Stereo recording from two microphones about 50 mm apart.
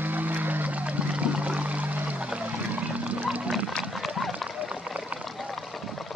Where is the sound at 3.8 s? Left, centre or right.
Centre; by 5.3 s right.